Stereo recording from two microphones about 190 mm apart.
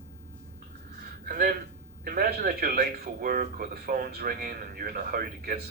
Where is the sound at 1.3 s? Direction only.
50° right (ahead or behind).